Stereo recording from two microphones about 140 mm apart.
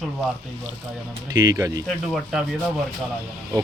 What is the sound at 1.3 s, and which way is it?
Speech, 25° right (ahead or behind).